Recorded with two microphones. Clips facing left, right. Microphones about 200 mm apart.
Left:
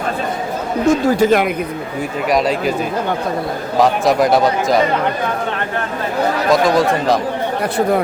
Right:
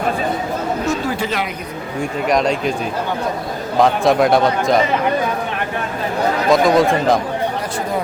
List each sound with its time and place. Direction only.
0.9 s speech: 45° left (ahead or behind)
2.0 s speech: 5° left (ahead or behind)
3.8 s speech: centre (ahead or behind)
6.5 s speech: centre (ahead or behind)